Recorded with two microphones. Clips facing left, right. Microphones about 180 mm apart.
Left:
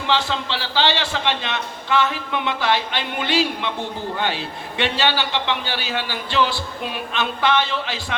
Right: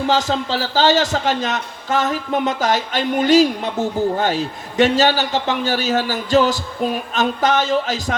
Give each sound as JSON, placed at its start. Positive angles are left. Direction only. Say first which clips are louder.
{"t": 0.1, "sound": "a man's voice", "louder": "right 1 dB", "side_deg": -40}